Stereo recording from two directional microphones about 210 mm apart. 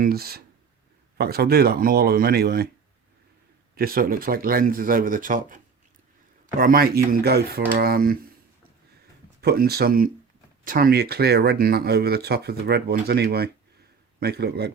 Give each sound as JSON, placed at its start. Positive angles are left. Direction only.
{"t": 0.0, "sound": "speech", "side_deg": -45}
{"t": 3.8, "sound": "speech", "side_deg": -45}
{"t": 6.6, "sound": "speech", "side_deg": -45}
{"t": 9.4, "sound": "speech", "side_deg": -50}